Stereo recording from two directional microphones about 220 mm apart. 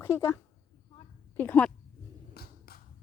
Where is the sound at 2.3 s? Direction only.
45° left (ahead or behind).